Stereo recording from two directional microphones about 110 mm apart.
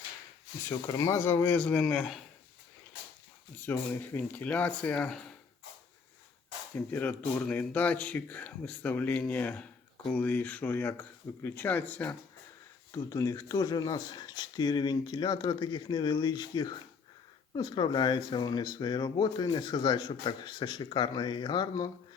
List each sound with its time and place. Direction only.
0.7 s speech: 30° left (ahead or behind); by 2.2 s centre (ahead or behind)
3.6 s speech: 15° left (ahead or behind)
6.7 s speech: 15° left (ahead or behind)
12.9 s speech: 30° left (ahead or behind); by 21.8 s 45° left (ahead or behind)